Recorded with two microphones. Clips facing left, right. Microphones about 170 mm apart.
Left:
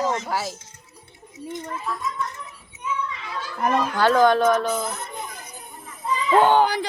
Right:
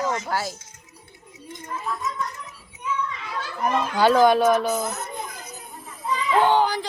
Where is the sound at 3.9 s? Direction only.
10° right (ahead or behind).